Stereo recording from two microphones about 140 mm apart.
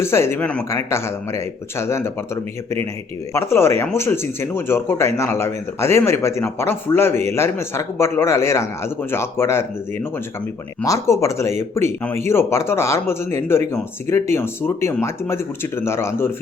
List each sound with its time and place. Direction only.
0.0 s speech: 20° left (ahead or behind)
10.8 s speech: 20° left (ahead or behind)